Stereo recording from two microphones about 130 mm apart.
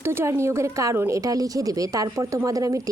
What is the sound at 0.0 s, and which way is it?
Speech, 20° right (ahead or behind).